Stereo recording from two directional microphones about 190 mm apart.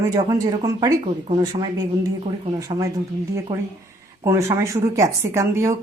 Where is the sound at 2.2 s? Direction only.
30° right (ahead or behind).